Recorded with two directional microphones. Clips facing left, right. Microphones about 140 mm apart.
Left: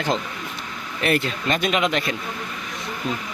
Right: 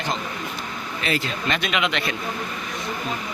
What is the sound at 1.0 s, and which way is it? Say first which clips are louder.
Speech: left 4 dB; 50° left (ahead or behind).